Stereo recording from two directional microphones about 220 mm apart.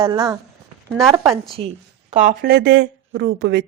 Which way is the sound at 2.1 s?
35° right (ahead or behind).